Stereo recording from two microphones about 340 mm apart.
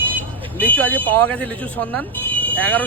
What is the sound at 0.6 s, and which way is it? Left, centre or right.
Speech, centre.